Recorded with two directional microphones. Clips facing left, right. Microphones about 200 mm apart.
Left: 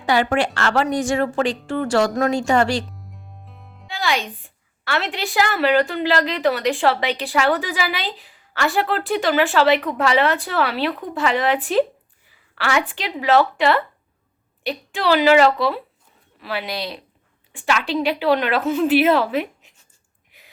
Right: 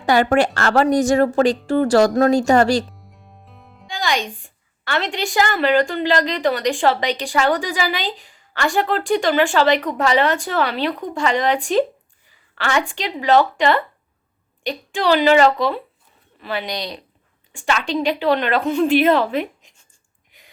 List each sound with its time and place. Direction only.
0.0 s a woman's voice: 45° right (ahead or behind)
2.9 s a woman's voice: centre (ahead or behind)
20.3 s gasp: 5° left (ahead or behind)